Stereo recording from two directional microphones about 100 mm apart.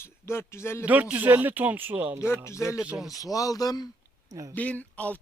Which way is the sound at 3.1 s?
35° left (ahead or behind).